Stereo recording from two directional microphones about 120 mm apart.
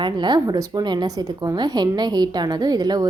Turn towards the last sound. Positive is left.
turn(degrees=-35)  # may be behind; listen again after turning